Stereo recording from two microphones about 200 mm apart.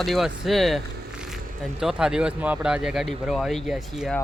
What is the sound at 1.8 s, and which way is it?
Speech, centre (ahead or behind).